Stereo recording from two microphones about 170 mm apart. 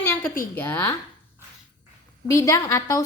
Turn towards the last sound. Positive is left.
turn(degrees=20)  # may be behind; listen again after turning